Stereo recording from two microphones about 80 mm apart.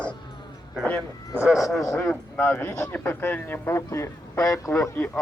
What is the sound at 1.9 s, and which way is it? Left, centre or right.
Speech, centre.